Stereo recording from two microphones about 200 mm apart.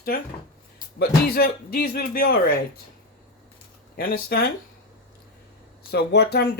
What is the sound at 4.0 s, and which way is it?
Speech, 50° left (ahead or behind).